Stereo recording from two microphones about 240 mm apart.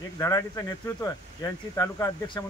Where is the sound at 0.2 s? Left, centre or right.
Centre.